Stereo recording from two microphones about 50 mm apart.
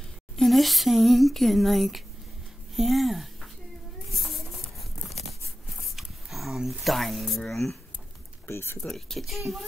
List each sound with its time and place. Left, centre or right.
0.4 s speech: centre
4.1 s a sound: centre
5.9 s speech: centre
8.5 s speech: left
8.8 s speech: centre